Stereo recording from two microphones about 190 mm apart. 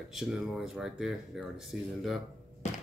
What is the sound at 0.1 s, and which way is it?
Speech, centre (ahead or behind).